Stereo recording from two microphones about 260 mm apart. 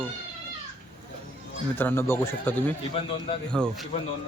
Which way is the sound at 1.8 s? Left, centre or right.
Centre.